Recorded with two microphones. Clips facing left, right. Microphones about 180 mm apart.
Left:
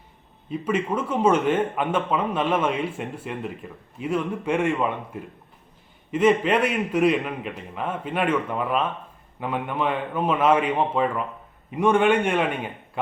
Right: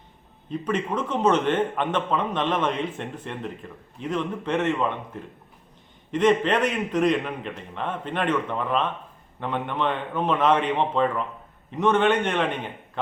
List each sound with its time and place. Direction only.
0.5 s speech: 10° left (ahead or behind)